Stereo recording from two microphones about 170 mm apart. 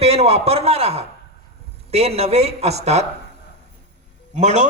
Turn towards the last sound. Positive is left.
turn(degrees=-45)  # may be behind; listen again after turning